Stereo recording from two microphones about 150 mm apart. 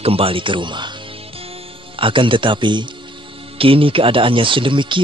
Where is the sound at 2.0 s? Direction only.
35° right (ahead or behind).